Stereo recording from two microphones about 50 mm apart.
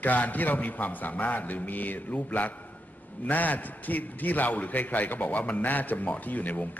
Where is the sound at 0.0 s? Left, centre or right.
Left.